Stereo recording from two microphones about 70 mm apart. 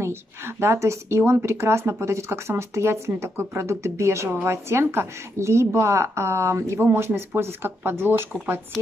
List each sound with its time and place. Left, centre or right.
0.0 s speech: right